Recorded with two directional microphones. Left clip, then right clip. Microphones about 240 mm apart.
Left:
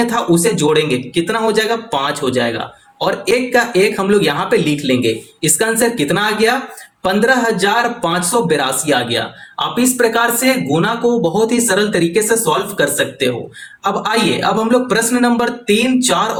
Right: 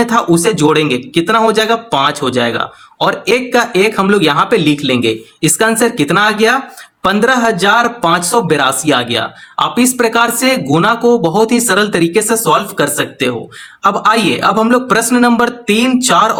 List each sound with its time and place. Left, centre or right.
0.0 s a man's voice: right